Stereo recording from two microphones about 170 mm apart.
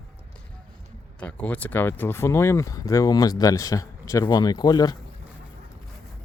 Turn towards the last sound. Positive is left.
turn(degrees=25)  # may be behind; listen again after turning